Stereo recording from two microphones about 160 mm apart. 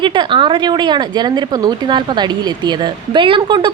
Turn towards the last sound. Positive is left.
turn(degrees=-30)  # may be behind; listen again after turning